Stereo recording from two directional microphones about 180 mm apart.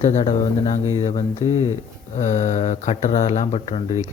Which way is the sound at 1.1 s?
20° left (ahead or behind).